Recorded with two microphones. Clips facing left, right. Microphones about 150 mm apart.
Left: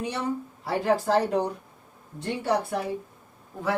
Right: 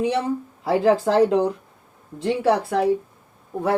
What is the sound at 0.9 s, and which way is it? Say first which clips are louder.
A woman's voice: right 6 dB; 90° right.